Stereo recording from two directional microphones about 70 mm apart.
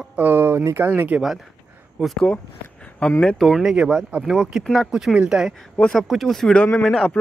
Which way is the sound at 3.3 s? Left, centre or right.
Centre.